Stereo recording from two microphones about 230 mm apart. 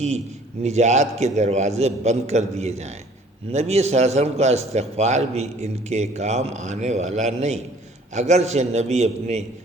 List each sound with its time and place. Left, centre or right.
0.6 s a man's voice: right